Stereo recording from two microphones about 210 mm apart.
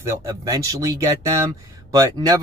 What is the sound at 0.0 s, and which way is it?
Speech, 15° right (ahead or behind).